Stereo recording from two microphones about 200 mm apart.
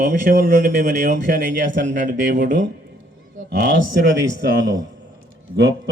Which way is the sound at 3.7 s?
70° right (ahead or behind).